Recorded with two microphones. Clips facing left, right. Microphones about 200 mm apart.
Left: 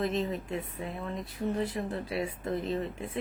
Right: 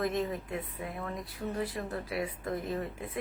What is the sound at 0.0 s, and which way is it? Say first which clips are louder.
Speech: left 1 dB; 25° left (ahead or behind).